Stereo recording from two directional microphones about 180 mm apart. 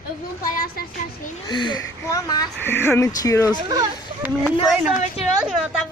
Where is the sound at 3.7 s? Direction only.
20° right (ahead or behind).